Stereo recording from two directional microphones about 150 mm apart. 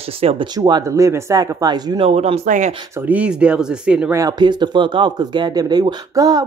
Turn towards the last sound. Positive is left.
turn(degrees=-25)  # may be behind; listen again after turning